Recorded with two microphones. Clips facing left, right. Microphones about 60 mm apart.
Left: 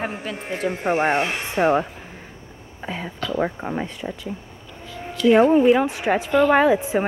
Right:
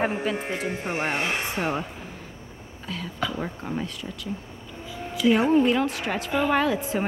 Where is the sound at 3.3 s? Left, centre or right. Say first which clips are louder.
Left 6 dB; left.